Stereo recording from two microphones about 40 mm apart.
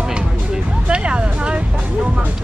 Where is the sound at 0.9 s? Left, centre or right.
Right.